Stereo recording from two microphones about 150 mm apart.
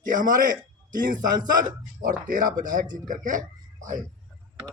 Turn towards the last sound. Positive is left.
turn(degrees=-60)  # may be behind; listen again after turning